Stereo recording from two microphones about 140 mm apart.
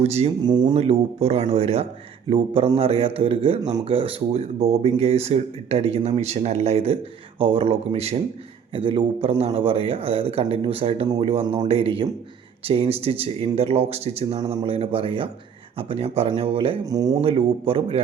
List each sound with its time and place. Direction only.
0.0 s speech: 50° right (ahead or behind)
0.4 s a man's voice: 30° right (ahead or behind)
0.8 s a man's voice: 45° right (ahead or behind)
16.8 s speech: 25° right (ahead or behind)
17.2 s speech: 45° right (ahead or behind)